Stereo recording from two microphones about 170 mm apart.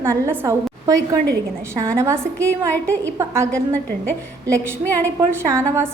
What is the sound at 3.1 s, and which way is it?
A woman's voice, 15° right (ahead or behind).